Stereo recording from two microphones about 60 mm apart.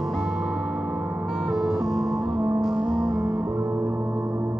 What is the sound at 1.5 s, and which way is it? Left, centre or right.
Music, centre.